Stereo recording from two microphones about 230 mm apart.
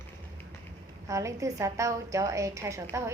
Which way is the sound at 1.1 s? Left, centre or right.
Centre.